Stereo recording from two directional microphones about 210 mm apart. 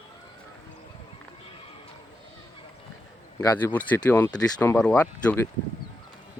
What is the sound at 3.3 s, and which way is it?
Speech, 10° left (ahead or behind).